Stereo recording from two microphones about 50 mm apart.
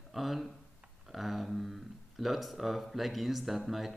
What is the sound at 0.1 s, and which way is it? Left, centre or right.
Speech, centre.